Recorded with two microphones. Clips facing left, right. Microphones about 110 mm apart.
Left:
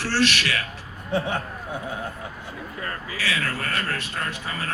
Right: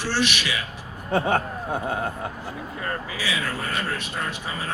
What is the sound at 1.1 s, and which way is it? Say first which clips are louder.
Speech: right 4 dB; 50° right (ahead or behind).